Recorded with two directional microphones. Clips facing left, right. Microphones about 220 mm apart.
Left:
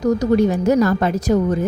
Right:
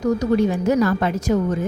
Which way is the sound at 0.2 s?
40° left (ahead or behind).